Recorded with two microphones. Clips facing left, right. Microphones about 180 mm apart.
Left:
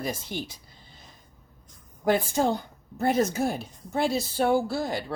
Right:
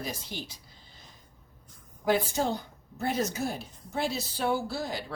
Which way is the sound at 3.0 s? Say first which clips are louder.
Left 6 dB; 50° left (ahead or behind).